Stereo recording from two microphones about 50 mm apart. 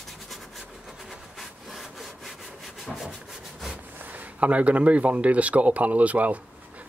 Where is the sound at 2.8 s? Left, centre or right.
Centre.